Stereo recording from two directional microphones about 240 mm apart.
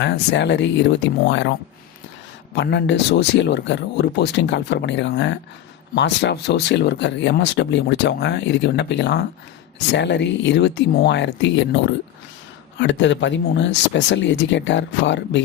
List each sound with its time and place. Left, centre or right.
0.0 s speech: left
2.6 s speech: left